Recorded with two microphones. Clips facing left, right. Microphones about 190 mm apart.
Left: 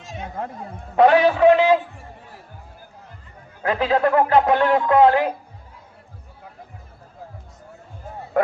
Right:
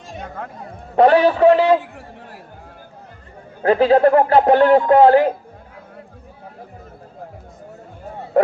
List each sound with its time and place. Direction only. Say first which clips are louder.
0.9 s speech: right 2 dB; 35° right (ahead or behind)
2.0 s a sound: right 4 dB; 70° right (ahead or behind)
3.6 s speech: right 7 dB; 30° right (ahead or behind)